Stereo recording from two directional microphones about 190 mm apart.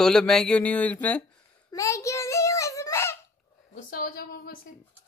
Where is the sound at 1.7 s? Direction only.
15° left (ahead or behind).